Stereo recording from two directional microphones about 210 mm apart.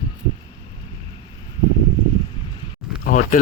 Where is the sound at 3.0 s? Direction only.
35° left (ahead or behind).